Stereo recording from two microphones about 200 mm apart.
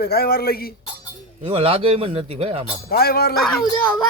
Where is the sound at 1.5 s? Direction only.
30° right (ahead or behind).